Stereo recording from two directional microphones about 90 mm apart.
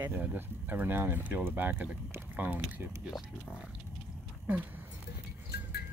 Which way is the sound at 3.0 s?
10° right (ahead or behind).